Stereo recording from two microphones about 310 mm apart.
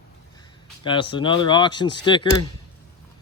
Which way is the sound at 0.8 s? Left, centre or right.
Centre.